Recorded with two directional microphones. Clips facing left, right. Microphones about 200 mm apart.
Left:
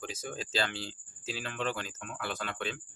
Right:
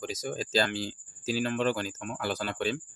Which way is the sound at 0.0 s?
40° right (ahead or behind).